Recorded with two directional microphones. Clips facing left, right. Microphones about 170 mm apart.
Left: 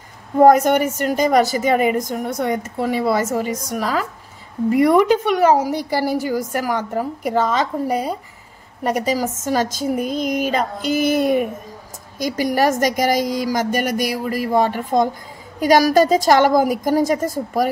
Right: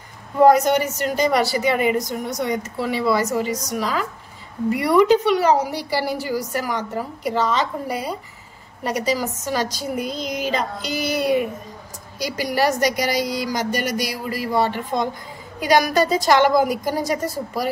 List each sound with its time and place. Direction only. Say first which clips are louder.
0.4 s a woman's voice: left 2 dB; 50° left (ahead or behind)